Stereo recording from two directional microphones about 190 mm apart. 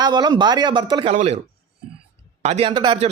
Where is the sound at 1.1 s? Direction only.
35° right (ahead or behind).